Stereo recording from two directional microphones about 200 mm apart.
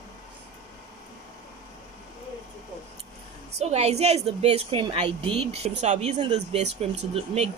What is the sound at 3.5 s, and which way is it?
A woman's voice, 35° right (ahead or behind).